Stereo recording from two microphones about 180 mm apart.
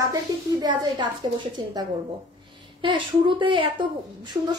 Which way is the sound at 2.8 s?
25° right (ahead or behind).